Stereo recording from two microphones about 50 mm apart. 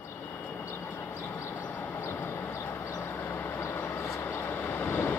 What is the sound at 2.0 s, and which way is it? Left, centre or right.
Vehicle, left.